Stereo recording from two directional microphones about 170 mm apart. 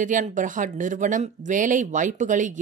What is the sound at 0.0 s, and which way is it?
Speech, 50° right (ahead or behind).